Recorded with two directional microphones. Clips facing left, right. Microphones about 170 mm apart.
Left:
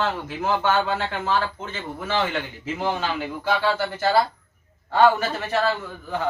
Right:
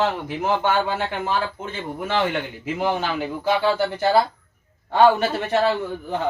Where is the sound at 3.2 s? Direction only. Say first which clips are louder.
Right 3 dB; 20° right (ahead or behind).